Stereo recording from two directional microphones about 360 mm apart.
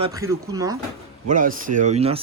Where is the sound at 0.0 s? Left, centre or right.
Centre.